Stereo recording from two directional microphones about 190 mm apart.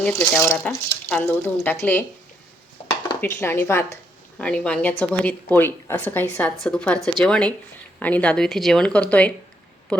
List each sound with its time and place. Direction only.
0.0 s speech: 5° left (ahead or behind)
3.2 s speech: 10° left (ahead or behind)